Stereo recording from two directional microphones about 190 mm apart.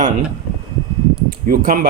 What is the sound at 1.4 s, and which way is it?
Speech, 50° right (ahead or behind).